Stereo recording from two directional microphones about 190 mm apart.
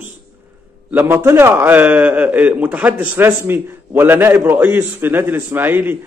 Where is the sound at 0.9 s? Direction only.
10° right (ahead or behind).